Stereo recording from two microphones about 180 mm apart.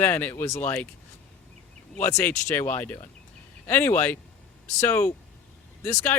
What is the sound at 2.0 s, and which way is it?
Speech, 15° left (ahead or behind).